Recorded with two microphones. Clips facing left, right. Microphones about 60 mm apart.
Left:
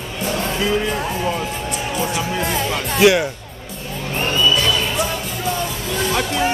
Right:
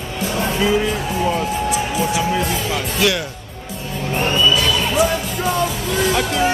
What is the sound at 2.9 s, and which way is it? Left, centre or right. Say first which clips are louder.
Speech: left 7 dB; left.